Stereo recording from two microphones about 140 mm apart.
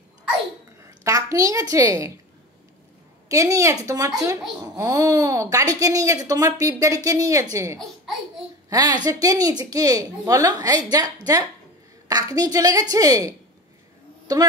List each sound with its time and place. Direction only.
0.8 s a woman's voice: 25° right (ahead or behind)
3.3 s a woman's voice: 25° right (ahead or behind)
14.3 s a woman's voice: 30° right (ahead or behind)